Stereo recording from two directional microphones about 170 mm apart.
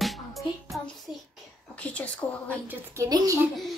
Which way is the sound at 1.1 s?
Centre (ahead or behind).